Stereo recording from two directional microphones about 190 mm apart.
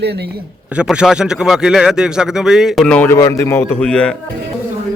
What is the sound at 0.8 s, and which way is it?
A man's voice, 5° right (ahead or behind).